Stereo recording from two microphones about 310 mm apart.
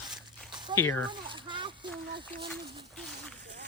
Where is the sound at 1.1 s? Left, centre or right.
Centre.